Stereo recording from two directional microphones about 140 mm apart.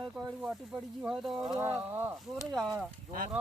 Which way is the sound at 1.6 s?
20° right (ahead or behind).